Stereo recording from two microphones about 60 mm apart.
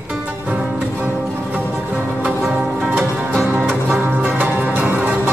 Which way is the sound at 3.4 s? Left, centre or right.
Right.